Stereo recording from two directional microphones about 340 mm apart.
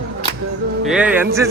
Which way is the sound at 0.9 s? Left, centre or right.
Centre.